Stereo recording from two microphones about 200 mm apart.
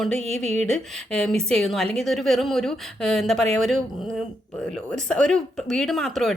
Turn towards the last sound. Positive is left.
turn(degrees=0)  # may be behind; listen again after turning